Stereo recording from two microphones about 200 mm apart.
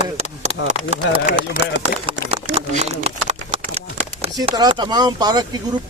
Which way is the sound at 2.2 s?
70° right (ahead or behind).